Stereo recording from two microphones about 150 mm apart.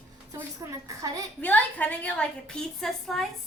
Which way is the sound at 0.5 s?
25° right (ahead or behind).